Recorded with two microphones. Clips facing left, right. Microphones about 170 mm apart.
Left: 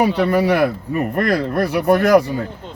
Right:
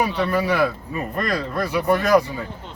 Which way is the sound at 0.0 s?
70° left (ahead or behind).